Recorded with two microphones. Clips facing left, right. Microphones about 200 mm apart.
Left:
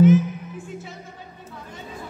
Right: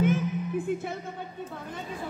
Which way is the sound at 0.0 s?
55° right (ahead or behind).